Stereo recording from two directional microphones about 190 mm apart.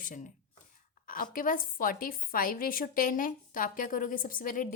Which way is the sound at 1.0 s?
45° left (ahead or behind).